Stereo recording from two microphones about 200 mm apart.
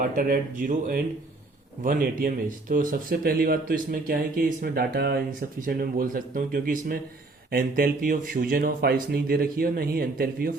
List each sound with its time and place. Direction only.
0.2 s speech: 45° right (ahead or behind)